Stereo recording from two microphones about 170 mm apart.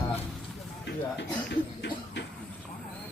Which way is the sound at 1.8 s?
90° left.